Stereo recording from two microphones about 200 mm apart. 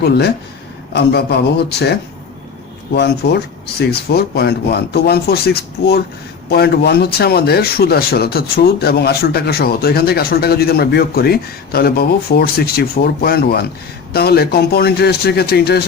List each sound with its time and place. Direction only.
0.0 s speech: 55° left (ahead or behind)